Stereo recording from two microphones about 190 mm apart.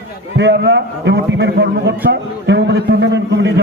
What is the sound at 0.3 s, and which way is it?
A man's voice, 65° right (ahead or behind).